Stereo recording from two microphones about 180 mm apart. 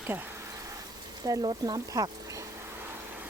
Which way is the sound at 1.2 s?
20° right (ahead or behind).